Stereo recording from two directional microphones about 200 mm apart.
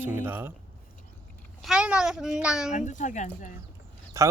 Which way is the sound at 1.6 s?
5° right (ahead or behind).